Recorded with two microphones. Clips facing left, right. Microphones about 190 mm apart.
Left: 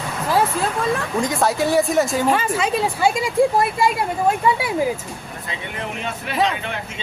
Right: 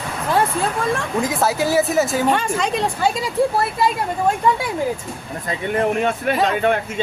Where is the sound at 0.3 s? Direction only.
Centre (ahead or behind).